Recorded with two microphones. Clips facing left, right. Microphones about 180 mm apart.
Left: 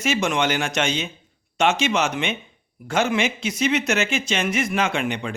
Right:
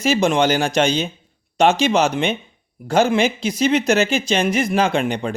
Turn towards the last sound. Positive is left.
turn(degrees=-35)  # may be behind; listen again after turning